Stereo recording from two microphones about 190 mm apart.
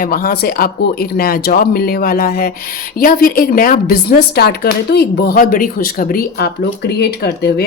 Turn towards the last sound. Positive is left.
turn(degrees=55)  # may be behind; listen again after turning